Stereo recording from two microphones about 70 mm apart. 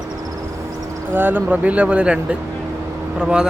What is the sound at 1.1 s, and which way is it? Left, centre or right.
A man's voice, right.